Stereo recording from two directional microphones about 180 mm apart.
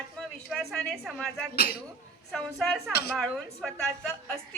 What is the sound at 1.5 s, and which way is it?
Speech, 60° left (ahead or behind).